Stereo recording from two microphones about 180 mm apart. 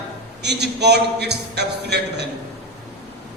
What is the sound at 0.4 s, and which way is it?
A man's voice, 70° right (ahead or behind).